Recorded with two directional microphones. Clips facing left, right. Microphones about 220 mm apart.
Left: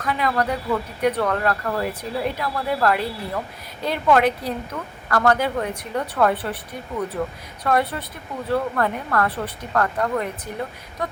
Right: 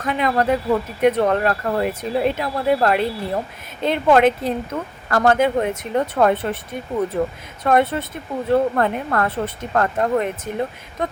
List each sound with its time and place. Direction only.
0.0 s speech: 20° right (ahead or behind)
7.6 s speech: 25° right (ahead or behind)